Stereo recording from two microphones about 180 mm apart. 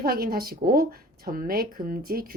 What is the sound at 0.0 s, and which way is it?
A woman's voice, 55° right (ahead or behind).